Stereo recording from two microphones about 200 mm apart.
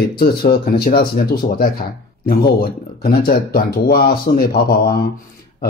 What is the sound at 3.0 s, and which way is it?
Speech, 50° left (ahead or behind).